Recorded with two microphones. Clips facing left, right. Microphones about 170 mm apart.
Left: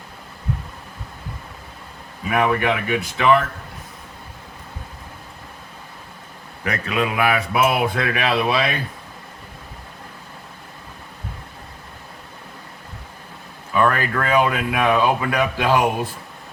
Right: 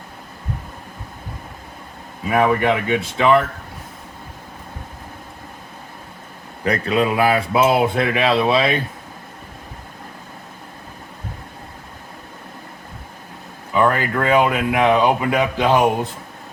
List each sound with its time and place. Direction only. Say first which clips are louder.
2.5 s speech: right 3 dB; 30° right (ahead or behind)
6.7 s speech: right 5 dB; 35° right (ahead or behind)
13.7 s speech: right 2 dB; 20° right (ahead or behind)